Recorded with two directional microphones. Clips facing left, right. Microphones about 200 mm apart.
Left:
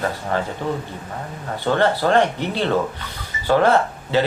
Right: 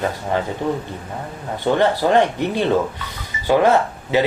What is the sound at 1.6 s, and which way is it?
Speech, 15° right (ahead or behind).